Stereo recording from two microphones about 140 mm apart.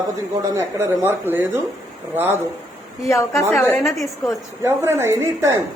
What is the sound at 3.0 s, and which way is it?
Speech, 20° left (ahead or behind).